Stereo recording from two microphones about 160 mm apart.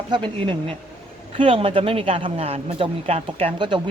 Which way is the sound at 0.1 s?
35° right (ahead or behind).